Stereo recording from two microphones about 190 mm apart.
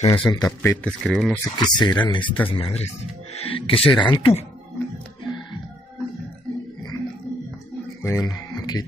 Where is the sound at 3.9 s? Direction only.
25° left (ahead or behind).